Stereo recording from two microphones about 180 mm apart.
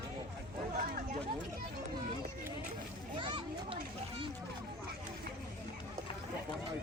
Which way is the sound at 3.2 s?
25° right (ahead or behind).